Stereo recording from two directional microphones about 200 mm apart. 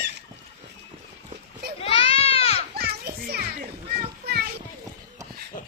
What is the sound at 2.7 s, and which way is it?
Music, 50° right (ahead or behind).